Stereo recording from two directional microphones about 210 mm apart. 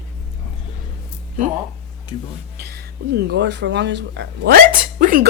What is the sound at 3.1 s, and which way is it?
Speech, 50° right (ahead or behind).